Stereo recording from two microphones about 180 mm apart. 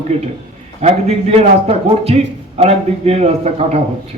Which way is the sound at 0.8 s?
35° right (ahead or behind).